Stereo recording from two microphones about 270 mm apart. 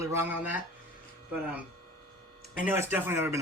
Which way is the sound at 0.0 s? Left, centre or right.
Centre.